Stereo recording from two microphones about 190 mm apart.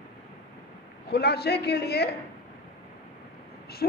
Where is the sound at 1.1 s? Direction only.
60° left (ahead or behind).